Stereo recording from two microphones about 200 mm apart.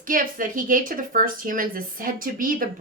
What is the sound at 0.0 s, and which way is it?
A woman's voice, 45° right (ahead or behind).